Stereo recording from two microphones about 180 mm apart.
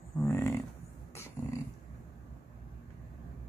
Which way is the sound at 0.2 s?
15° left (ahead or behind).